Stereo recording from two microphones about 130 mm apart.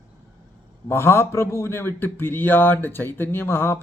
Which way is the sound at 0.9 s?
20° left (ahead or behind).